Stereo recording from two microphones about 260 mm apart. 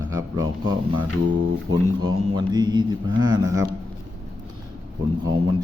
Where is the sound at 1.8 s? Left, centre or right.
Right.